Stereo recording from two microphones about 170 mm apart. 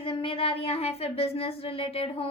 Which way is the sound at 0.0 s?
30° left (ahead or behind).